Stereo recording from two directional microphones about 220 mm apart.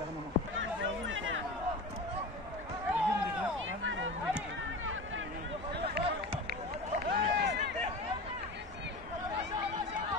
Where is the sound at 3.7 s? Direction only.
60° right (ahead or behind).